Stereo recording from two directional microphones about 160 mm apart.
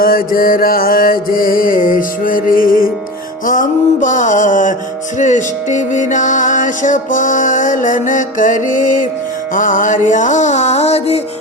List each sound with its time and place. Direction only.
0.0 s music: 65° left (ahead or behind); by 11.2 s 40° left (ahead or behind)